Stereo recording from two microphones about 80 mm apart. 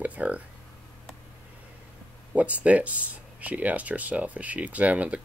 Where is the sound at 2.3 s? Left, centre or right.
Centre.